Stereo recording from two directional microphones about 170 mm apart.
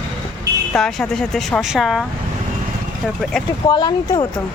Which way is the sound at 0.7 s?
5° left (ahead or behind).